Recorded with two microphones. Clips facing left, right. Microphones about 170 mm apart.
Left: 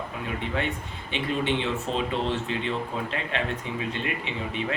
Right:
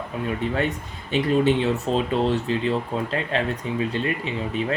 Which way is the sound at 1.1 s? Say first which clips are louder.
Right 7 dB; 40° right (ahead or behind).